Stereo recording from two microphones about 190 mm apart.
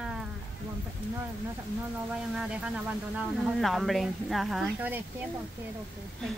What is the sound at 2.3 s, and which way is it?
Speech, 5° right (ahead or behind).